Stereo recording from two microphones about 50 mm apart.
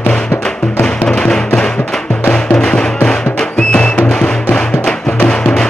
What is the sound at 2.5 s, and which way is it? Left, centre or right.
Music, centre.